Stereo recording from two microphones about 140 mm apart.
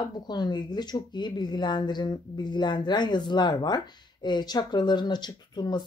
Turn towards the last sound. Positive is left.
turn(degrees=30)  # may be behind; listen again after turning